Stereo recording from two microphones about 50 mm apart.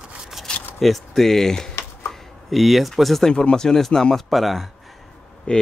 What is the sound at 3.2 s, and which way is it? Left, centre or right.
Speech, centre.